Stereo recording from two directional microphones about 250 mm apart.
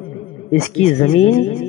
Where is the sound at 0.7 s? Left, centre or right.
Left.